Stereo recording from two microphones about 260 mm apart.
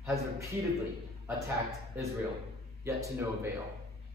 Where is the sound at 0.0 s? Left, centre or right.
Centre.